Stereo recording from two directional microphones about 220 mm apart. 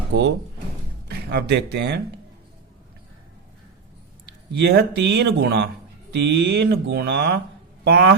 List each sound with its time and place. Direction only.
1.0 s speech: 45° right (ahead or behind)
4.3 s speech: 50° right (ahead or behind)